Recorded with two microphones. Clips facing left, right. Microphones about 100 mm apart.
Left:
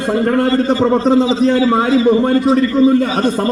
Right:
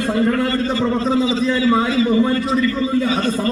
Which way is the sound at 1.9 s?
25° left (ahead or behind).